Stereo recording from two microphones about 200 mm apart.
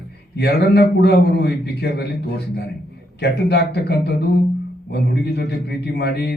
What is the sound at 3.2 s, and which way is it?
Speech, 55° left (ahead or behind).